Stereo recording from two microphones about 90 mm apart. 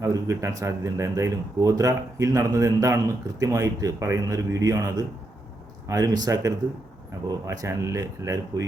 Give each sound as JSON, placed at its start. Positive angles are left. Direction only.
{"t": 0.0, "sound": "speech", "side_deg": -35}
{"t": 5.9, "sound": "speech", "side_deg": -45}